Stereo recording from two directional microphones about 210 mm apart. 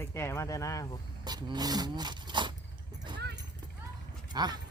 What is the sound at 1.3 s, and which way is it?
Speech, 20° right (ahead or behind).